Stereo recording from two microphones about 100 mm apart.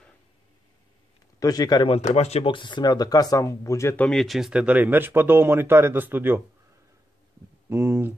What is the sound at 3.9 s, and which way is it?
Speech, 10° left (ahead or behind).